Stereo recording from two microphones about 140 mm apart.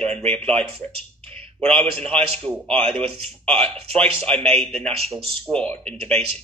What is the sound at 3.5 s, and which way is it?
Speech, 45° right (ahead or behind).